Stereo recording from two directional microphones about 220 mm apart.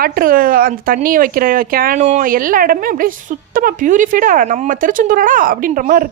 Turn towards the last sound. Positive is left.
turn(degrees=-40)  # may be behind; listen again after turning